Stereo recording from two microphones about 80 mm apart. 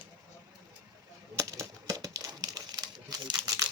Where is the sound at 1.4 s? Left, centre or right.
Right.